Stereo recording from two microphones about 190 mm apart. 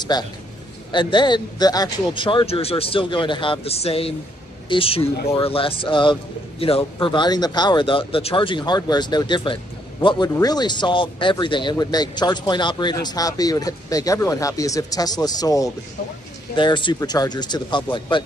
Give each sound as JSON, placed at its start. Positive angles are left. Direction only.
{"t": 0.1, "sound": "speech", "side_deg": 20}